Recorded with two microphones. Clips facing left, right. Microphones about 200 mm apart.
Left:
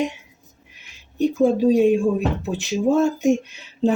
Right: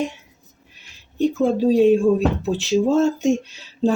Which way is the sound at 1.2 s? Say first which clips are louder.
Left 1 dB; 15° left (ahead or behind).